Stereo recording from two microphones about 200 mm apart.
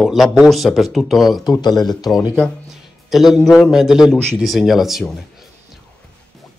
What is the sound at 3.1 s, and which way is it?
A man's voice, centre (ahead or behind).